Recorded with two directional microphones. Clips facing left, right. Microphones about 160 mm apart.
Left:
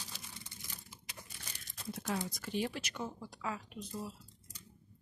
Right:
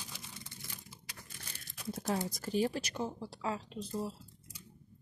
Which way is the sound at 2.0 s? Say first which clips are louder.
Right 3 dB; 35° right (ahead or behind).